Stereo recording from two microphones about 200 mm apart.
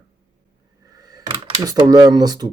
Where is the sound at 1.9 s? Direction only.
20° right (ahead or behind).